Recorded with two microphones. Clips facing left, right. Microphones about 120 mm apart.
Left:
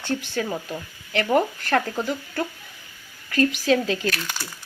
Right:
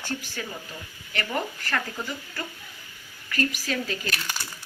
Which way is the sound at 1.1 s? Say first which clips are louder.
Left 9 dB; 65° left (ahead or behind).